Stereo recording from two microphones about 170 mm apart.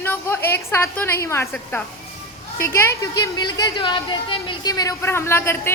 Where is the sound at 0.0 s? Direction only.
10° left (ahead or behind).